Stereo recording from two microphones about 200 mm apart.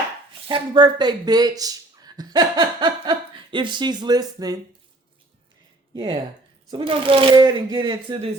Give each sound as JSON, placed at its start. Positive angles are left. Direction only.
{"t": 0.4, "sound": "speech", "side_deg": -25}
{"t": 5.9, "sound": "speech", "side_deg": -20}